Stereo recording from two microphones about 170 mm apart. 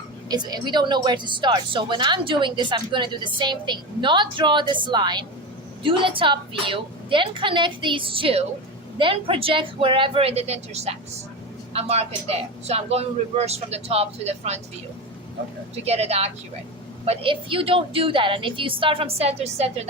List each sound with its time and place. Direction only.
0.3 s a man's voice: 25° right (ahead or behind); by 14.6 s 40° right (ahead or behind)
15.8 s a man's voice: 35° right (ahead or behind)